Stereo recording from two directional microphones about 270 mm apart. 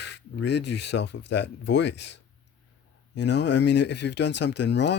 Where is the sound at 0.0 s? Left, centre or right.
Left.